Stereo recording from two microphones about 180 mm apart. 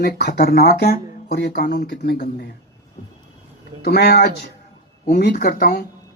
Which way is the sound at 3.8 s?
65° left (ahead or behind).